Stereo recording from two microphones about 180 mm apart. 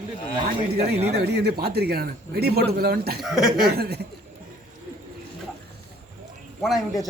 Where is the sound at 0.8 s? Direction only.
35° right (ahead or behind).